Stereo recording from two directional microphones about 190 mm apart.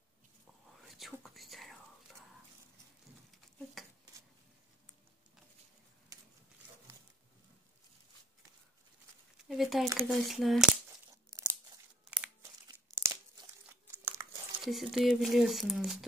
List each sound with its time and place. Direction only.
0.8 s whispering: centre (ahead or behind)
9.5 s speech: centre (ahead or behind)
11.1 s tearing: 15° right (ahead or behind)
12.6 s crumpling: 20° right (ahead or behind)
14.6 s speech: centre (ahead or behind)